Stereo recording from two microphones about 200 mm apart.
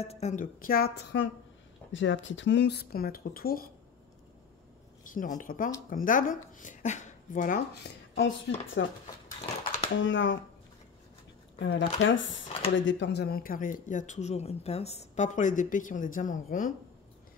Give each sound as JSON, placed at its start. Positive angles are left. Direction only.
{"t": 0.0, "sound": "a woman's voice", "side_deg": 30}
{"t": 5.1, "sound": "a woman's voice", "side_deg": 40}
{"t": 7.8, "sound": "speech", "side_deg": 60}
{"t": 9.9, "sound": "speech", "side_deg": 65}
{"t": 11.6, "sound": "speech", "side_deg": 70}